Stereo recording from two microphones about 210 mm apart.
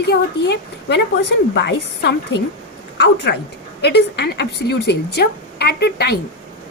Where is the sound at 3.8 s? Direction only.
50° left (ahead or behind).